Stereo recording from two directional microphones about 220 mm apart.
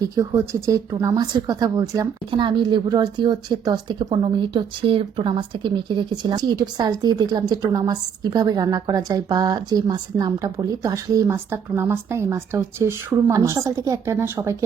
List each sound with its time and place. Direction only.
0.0 s speech: 15° right (ahead or behind)